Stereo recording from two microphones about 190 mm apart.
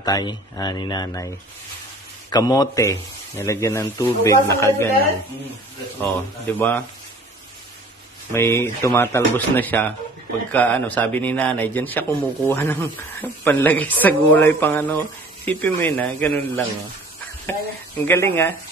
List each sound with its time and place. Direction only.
0.0 s speech: 20° left (ahead or behind)
2.3 s a man's voice: 20° left (ahead or behind)
5.9 s a man's voice: 10° left (ahead or behind)
8.3 s a man's voice: 15° left (ahead or behind)